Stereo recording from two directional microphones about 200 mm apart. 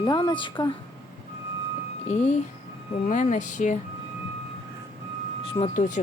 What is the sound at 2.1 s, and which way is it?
Speech, 35° left (ahead or behind).